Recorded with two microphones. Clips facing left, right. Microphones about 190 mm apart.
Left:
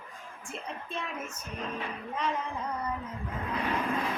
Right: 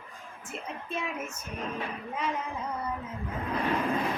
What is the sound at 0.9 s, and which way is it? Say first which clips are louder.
Speech: right 5 dB; 10° right (ahead or behind).